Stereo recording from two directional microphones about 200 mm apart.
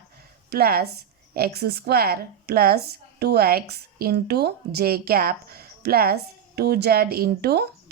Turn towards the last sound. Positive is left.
turn(degrees=-50)  # may be behind; listen again after turning